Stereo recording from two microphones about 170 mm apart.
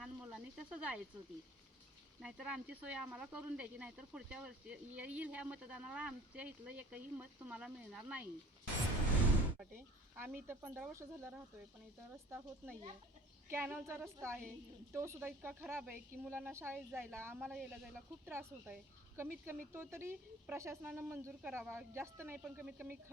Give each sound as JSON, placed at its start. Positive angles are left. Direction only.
{"t": 0.0, "sound": "a sound", "side_deg": 0}
{"t": 2.2, "sound": "speech", "side_deg": -5}
{"t": 9.6, "sound": "speech", "side_deg": -10}